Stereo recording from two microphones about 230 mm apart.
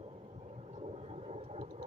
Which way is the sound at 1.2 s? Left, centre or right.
Right.